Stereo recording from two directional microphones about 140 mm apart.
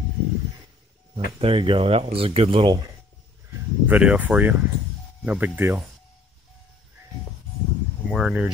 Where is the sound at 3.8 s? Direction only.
10° right (ahead or behind).